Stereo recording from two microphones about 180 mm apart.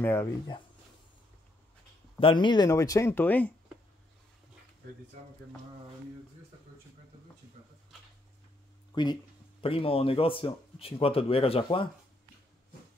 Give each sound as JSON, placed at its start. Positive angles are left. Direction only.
{"t": 0.0, "sound": "speech", "side_deg": 15}
{"t": 2.1, "sound": "speech", "side_deg": 30}
{"t": 8.9, "sound": "speech", "side_deg": 25}